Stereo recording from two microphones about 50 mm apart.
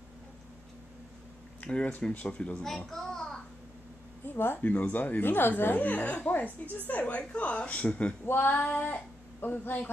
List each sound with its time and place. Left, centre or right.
1.7 s a woman's voice: left
2.9 s a sound: centre
4.3 s a woman's voice: left
8.3 s female singing: left
8.5 s child singing: left